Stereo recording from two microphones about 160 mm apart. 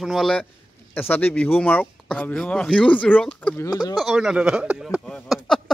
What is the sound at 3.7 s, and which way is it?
Speech, 25° left (ahead or behind).